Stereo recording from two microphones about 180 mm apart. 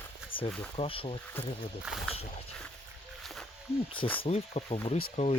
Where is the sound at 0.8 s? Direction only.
30° left (ahead or behind).